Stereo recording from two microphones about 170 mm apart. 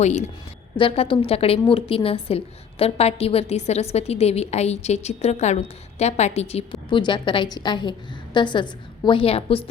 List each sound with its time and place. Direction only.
0.0 s a woman's voice: 45° left (ahead or behind)
0.8 s a woman's voice: 30° left (ahead or behind)